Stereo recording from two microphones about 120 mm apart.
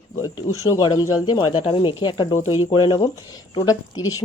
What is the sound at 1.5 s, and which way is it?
A woman's voice, 50° left (ahead or behind).